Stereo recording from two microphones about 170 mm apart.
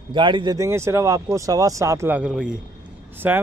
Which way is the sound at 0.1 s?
30° right (ahead or behind).